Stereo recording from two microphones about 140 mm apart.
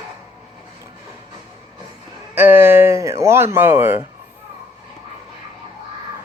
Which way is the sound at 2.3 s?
15° right (ahead or behind).